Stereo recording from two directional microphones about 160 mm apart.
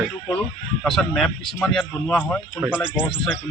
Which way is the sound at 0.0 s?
5° left (ahead or behind).